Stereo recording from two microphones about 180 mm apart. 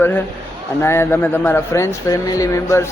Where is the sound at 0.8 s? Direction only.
15° left (ahead or behind).